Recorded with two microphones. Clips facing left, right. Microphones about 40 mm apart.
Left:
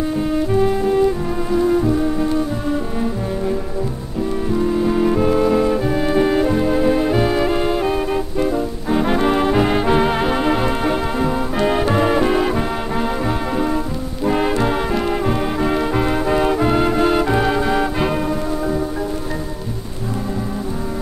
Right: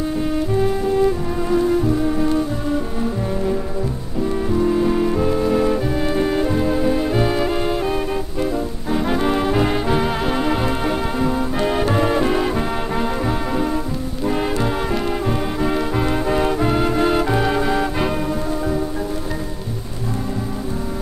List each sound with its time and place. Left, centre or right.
0.3 s music: centre
4.5 s music: centre
5.0 s music: centre
5.5 s music: centre
14.2 s music: centre